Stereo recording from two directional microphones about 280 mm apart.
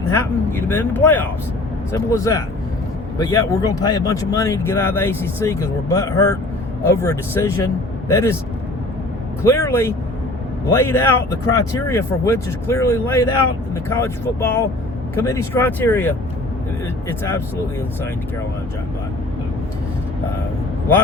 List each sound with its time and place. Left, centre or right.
0.1 s speech: centre
9.4 s speech: centre